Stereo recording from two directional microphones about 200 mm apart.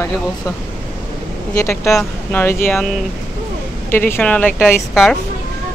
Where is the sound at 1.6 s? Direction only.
15° left (ahead or behind); by 5.2 s centre (ahead or behind).